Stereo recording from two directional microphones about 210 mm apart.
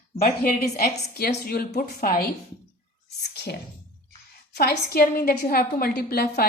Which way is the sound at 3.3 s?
55° left (ahead or behind).